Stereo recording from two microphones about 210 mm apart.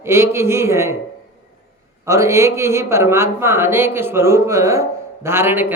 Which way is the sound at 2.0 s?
15° right (ahead or behind).